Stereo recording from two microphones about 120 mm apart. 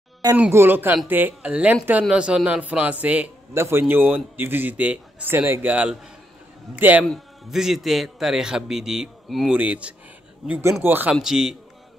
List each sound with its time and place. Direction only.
0.4 s speech: 20° right (ahead or behind)
7.1 s a man's voice: 5° right (ahead or behind)
11.1 s a man's voice: 5° right (ahead or behind)